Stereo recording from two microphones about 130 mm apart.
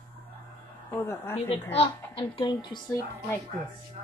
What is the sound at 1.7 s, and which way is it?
A child's voice, 45° left (ahead or behind).